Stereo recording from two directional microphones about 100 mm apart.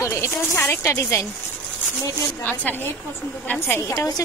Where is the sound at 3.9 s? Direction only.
35° left (ahead or behind).